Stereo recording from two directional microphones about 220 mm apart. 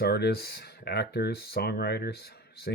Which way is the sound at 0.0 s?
45° left (ahead or behind).